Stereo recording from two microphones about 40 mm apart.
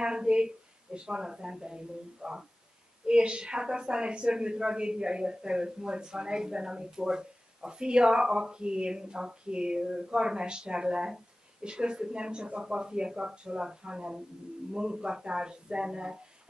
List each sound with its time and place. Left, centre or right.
0.0 s a woman's voice: centre